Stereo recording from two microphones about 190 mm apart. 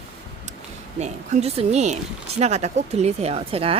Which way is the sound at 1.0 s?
35° right (ahead or behind).